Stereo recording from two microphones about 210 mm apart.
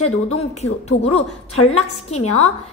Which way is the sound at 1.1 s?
85° left.